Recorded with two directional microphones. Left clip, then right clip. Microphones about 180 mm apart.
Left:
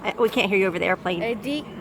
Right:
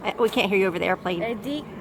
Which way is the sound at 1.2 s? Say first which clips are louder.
Left 2 dB; 30° left (ahead or behind).